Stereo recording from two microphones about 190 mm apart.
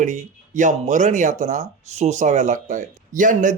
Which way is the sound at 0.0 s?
40° right (ahead or behind).